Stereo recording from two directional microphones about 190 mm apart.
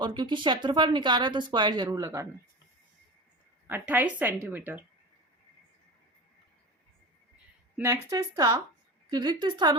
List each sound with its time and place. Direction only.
0.0 s speech: 25° right (ahead or behind)
3.7 s a woman's voice: 10° right (ahead or behind)
8.1 s speech: 20° right (ahead or behind)